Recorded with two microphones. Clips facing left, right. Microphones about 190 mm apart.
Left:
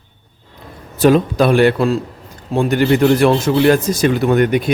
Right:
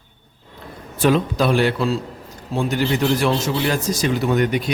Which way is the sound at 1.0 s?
50° left (ahead or behind).